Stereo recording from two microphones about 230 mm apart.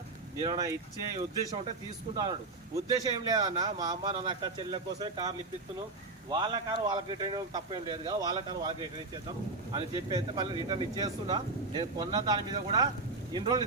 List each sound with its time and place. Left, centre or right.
0.3 s speech: centre
2.7 s speech: centre